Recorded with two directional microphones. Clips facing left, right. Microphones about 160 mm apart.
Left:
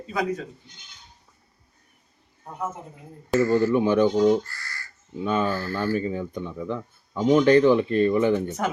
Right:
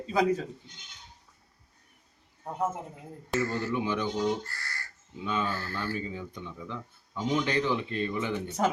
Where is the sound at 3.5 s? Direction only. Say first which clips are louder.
Left 10 dB; 50° left (ahead or behind).